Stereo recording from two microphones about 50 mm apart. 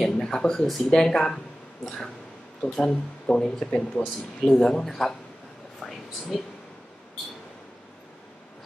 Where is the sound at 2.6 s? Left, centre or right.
Left.